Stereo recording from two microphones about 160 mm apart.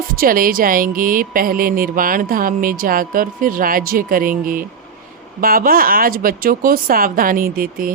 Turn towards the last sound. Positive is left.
turn(degrees=-65)  # may be behind; listen again after turning